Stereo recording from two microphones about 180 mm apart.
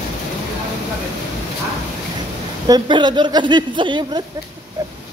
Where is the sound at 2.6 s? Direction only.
25° right (ahead or behind).